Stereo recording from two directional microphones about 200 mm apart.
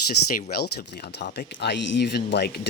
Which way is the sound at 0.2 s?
90° left.